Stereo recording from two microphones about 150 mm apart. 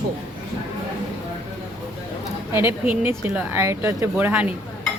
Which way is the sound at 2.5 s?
15° right (ahead or behind).